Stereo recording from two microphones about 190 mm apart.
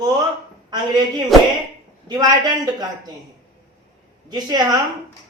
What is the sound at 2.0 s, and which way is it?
Speech, 20° right (ahead or behind).